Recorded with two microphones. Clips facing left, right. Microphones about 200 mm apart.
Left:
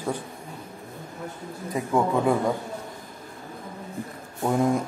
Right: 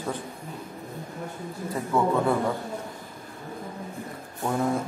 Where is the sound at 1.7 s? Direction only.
15° left (ahead or behind).